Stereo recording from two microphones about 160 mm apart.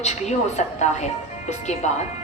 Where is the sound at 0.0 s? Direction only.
45° left (ahead or behind).